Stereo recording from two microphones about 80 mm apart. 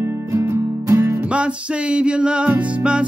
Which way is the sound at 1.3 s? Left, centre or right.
Centre.